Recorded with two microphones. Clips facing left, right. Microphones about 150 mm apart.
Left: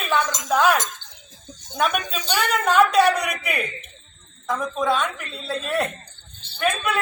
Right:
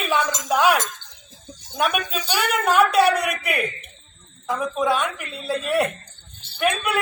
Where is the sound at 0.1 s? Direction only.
10° right (ahead or behind).